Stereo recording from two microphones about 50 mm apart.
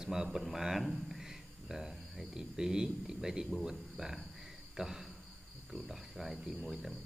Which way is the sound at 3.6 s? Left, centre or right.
Centre.